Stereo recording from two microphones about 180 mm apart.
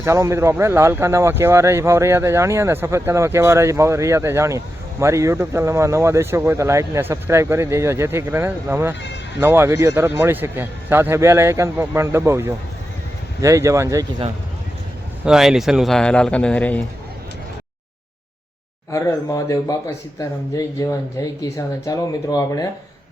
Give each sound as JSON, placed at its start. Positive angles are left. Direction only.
{"t": 0.0, "sound": "speech", "side_deg": -15}
{"t": 15.2, "sound": "speech", "side_deg": -5}
{"t": 18.9, "sound": "speech", "side_deg": 15}